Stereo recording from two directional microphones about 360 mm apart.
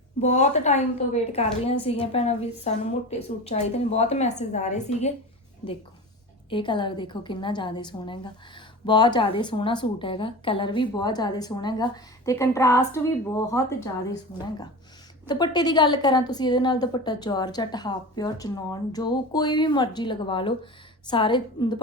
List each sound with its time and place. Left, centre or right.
0.2 s a woman's voice: centre
6.5 s a woman's voice: centre